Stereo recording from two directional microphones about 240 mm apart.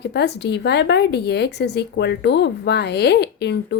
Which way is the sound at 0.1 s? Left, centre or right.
Left.